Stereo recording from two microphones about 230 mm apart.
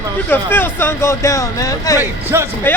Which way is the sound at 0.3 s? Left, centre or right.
Centre.